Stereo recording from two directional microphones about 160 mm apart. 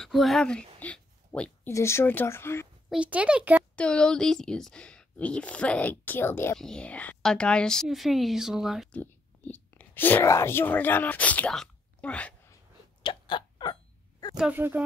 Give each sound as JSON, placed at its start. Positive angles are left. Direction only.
{"t": 0.0, "sound": "speech", "side_deg": 0}
{"t": 0.7, "sound": "a sound", "side_deg": 10}
{"t": 1.7, "sound": "speech", "side_deg": 15}
{"t": 2.9, "sound": "speech", "side_deg": -5}
{"t": 3.7, "sound": "speech", "side_deg": 5}
{"t": 8.9, "sound": "speech", "side_deg": 10}
{"t": 13.0, "sound": "hiccup", "side_deg": 30}
{"t": 14.3, "sound": "speech", "side_deg": -10}